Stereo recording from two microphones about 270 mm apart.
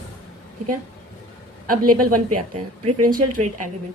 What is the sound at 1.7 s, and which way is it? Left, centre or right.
Speech, right.